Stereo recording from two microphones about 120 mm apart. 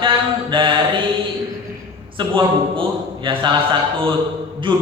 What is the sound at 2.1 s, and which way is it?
A man's voice, 45° right (ahead or behind).